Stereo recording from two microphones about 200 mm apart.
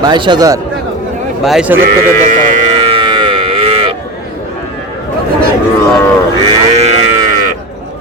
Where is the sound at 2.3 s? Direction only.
40° right (ahead or behind).